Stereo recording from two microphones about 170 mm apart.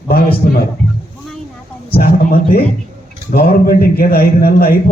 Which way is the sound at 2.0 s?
60° left (ahead or behind).